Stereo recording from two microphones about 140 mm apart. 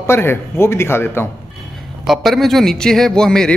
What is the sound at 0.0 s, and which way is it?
A man's voice, 15° left (ahead or behind).